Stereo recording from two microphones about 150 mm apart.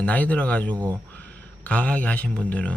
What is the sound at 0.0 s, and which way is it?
Speech, 10° left (ahead or behind).